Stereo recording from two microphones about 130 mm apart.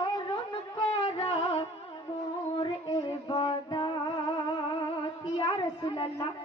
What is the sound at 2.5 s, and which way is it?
Music, 40° left (ahead or behind).